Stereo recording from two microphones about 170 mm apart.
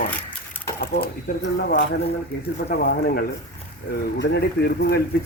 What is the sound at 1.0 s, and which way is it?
Speech, 65° left (ahead or behind).